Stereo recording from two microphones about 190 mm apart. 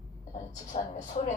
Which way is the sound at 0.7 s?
35° left (ahead or behind).